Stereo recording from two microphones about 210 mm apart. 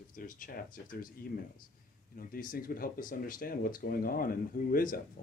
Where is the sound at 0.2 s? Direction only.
40° left (ahead or behind).